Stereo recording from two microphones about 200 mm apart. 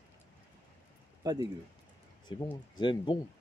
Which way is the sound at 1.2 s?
20° right (ahead or behind).